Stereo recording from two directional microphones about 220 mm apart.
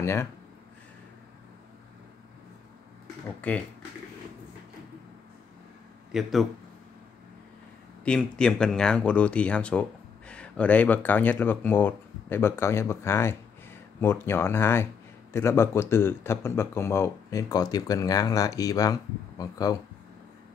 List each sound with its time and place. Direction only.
0.0 s speech: 10° left (ahead or behind)
3.3 s speech: 5° left (ahead or behind)
6.1 s speech: centre (ahead or behind)
8.0 s speech: 5° left (ahead or behind)